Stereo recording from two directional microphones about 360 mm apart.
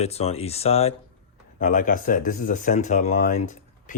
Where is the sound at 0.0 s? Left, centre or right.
Centre.